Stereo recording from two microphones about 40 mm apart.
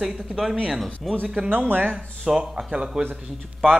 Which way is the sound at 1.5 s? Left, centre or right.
Right.